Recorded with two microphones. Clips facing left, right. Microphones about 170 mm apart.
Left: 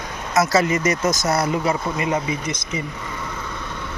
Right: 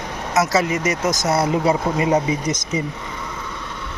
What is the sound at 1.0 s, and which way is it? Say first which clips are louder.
Speech: right 1 dB; 15° right (ahead or behind).